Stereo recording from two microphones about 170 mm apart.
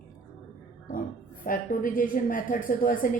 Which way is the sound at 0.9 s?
55° left (ahead or behind).